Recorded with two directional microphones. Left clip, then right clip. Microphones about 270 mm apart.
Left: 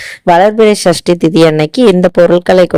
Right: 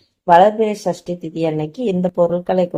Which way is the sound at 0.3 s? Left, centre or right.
Left.